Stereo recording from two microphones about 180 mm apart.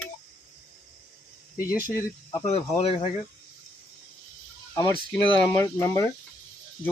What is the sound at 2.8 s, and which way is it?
Speech, 30° left (ahead or behind).